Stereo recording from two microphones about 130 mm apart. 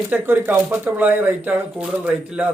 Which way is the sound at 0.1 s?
15° right (ahead or behind).